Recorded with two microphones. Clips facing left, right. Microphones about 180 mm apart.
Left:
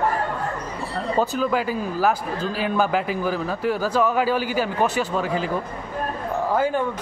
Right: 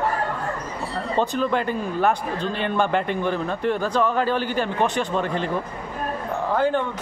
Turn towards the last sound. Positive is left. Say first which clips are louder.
# even
turn(degrees=5)  # may be behind; listen again after turning